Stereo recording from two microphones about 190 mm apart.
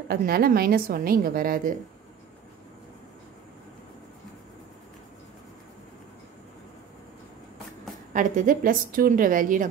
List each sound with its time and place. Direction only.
0.1 s a woman's voice: 50° right (ahead or behind)
8.1 s a woman's voice: 45° right (ahead or behind)